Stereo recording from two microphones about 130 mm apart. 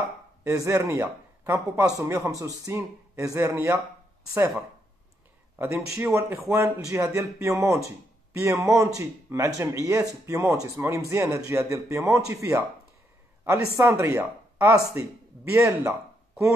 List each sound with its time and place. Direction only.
0.4 s speech: 20° right (ahead or behind)
5.6 s speech: 15° right (ahead or behind)